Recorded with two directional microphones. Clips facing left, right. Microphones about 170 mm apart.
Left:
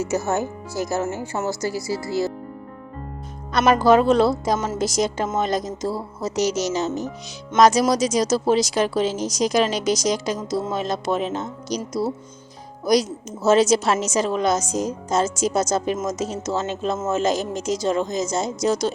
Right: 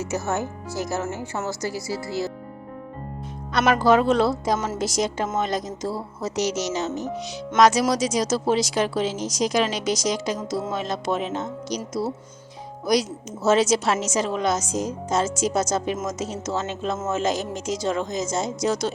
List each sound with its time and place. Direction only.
1.5 s speech: 40° left (ahead or behind)
3.5 s speech: 40° left (ahead or behind)
12.9 s speech: 40° left (ahead or behind)